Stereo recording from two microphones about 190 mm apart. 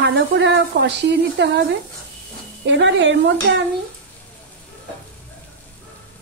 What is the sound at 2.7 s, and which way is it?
Speech, 70° right (ahead or behind).